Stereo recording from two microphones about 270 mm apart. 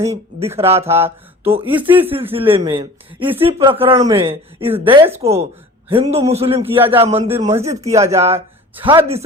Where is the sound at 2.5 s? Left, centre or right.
Centre.